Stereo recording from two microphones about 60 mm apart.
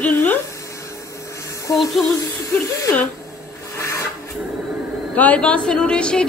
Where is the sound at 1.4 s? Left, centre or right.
Left.